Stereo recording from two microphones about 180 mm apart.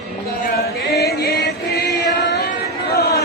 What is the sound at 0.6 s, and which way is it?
Chant, 60° left (ahead or behind).